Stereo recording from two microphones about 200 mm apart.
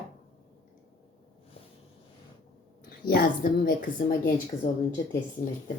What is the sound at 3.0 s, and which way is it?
A woman's voice, 45° left (ahead or behind).